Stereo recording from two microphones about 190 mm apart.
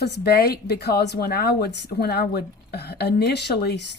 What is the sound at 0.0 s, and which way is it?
Speech, 60° left (ahead or behind).